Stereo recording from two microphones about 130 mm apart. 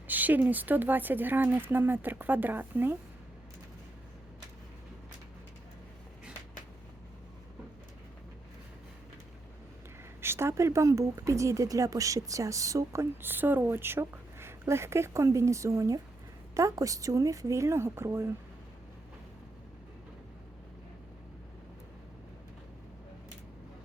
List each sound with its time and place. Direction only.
0.1 s speech: 15° right (ahead or behind)
10.2 s speech: 20° right (ahead or behind)